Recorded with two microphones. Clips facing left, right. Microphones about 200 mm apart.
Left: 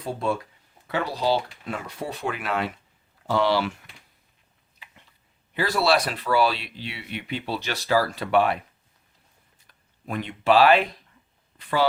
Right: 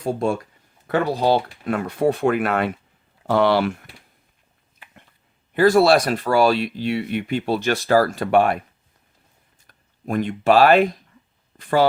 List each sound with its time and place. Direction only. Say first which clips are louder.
0.0 s speech: right 5 dB; 45° right (ahead or behind)
4.8 s a sound: right 2 dB; 50° right (ahead or behind)
5.5 s speech: right 8 dB; 45° right (ahead or behind)
9.6 s speech: right 7 dB; 45° right (ahead or behind)